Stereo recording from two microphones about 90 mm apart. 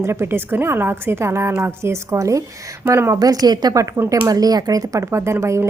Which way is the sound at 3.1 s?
45° right (ahead or behind).